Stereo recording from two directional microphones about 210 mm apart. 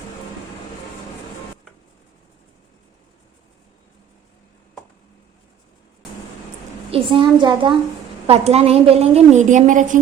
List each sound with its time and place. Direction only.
6.9 s a child's voice: 25° right (ahead or behind)